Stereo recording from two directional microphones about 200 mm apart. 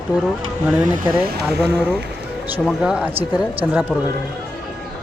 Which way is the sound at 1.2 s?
50° right (ahead or behind).